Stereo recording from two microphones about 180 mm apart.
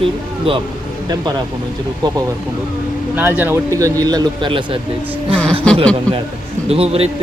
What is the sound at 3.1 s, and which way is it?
Speech, 10° right (ahead or behind).